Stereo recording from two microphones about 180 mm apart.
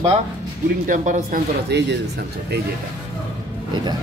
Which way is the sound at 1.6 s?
70° right (ahead or behind).